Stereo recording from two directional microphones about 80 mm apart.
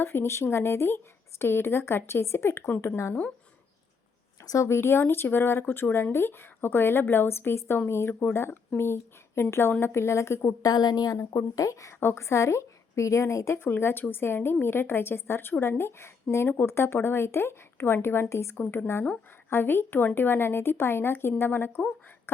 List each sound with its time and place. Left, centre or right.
0.0 s speech: left
4.4 s speech: left
10.6 s a woman's voice: left